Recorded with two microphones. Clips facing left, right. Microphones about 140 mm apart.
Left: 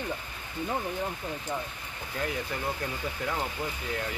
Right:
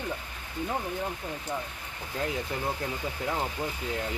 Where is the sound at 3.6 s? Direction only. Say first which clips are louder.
Right 1 dB; 20° right (ahead or behind).